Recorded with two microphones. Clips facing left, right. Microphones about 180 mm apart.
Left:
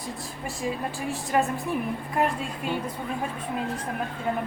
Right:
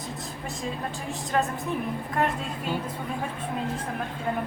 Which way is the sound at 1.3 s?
10° left (ahead or behind).